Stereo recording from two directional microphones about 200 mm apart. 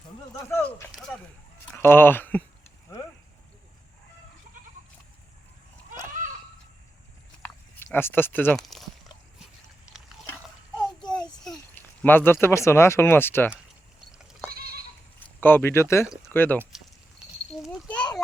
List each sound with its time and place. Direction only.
0.4 s speech: 10° left (ahead or behind)
7.8 s speech: 10° left (ahead or behind)
11.1 s a child's voice: 5° left (ahead or behind)
14.1 s goat: 5° right (ahead or behind)
14.5 s goat: 50° right (ahead or behind)
15.4 s speech: 10° left (ahead or behind)
17.5 s a sound: centre (ahead or behind)